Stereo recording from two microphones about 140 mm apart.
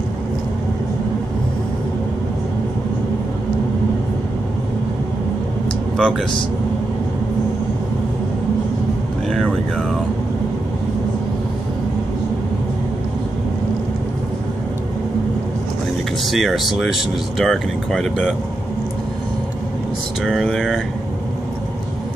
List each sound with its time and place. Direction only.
5.9 s speech: 5° left (ahead or behind)
9.3 s vehicle: 5° left (ahead or behind)
16.3 s speech: centre (ahead or behind)
20.2 s speech: centre (ahead or behind)